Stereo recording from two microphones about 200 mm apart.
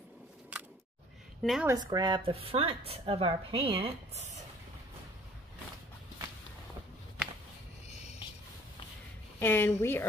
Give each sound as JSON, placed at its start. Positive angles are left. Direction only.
{"t": 0.5, "sound": "a sound", "side_deg": -5}
{"t": 1.4, "sound": "a woman's voice", "side_deg": 0}
{"t": 1.7, "sound": "a woman's voice", "side_deg": -20}
{"t": 9.4, "sound": "speech", "side_deg": 10}